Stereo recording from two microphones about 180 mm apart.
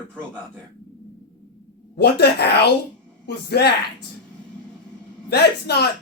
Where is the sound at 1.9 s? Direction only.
65° left (ahead or behind).